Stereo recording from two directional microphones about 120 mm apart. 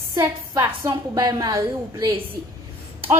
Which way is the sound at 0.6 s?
35° right (ahead or behind).